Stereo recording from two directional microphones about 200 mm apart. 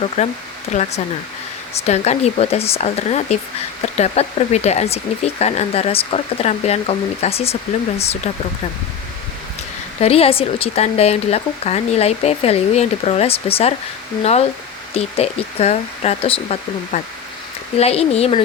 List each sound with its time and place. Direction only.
0.2 s speech: 35° left (ahead or behind)
10.0 s speech: 30° left (ahead or behind)
14.9 s speech: 30° left (ahead or behind)